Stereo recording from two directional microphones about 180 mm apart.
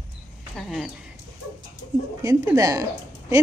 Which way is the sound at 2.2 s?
15° right (ahead or behind).